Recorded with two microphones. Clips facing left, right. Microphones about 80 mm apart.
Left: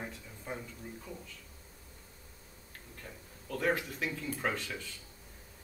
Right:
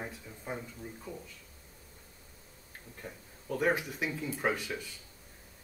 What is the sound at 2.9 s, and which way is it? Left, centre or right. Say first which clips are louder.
Speech: right 4 dB; centre.